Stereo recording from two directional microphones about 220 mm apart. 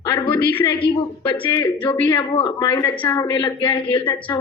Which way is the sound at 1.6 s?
5° left (ahead or behind).